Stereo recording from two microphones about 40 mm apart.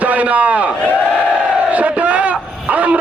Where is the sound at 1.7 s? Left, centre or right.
Right.